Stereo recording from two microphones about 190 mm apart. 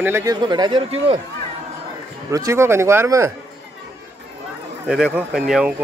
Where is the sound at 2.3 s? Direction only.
15° right (ahead or behind).